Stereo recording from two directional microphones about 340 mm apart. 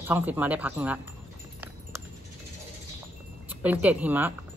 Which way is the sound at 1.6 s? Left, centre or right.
Centre.